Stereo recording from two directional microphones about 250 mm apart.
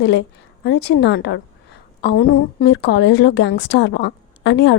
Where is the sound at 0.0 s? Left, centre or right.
Left.